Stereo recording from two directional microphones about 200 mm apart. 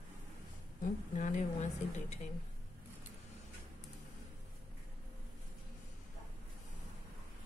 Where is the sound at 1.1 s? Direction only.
40° left (ahead or behind).